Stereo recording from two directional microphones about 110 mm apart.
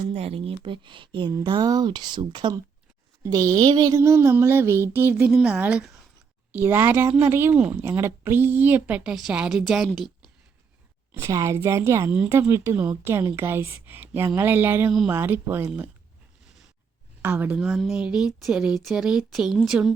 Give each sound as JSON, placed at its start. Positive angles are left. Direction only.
{"t": 0.1, "sound": "speech", "side_deg": -65}
{"t": 1.5, "sound": "speech", "side_deg": -40}
{"t": 3.9, "sound": "a woman's voice", "side_deg": -25}
{"t": 5.3, "sound": "a woman's voice", "side_deg": -10}
{"t": 11.1, "sound": "a woman's voice", "side_deg": -30}
{"t": 17.2, "sound": "a woman's voice", "side_deg": -15}
{"t": 17.6, "sound": "speech", "side_deg": -5}